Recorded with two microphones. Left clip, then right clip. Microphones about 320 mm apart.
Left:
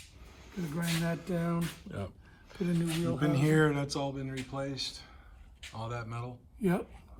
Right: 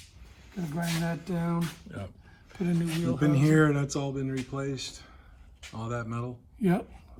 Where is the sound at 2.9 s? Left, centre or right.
Centre.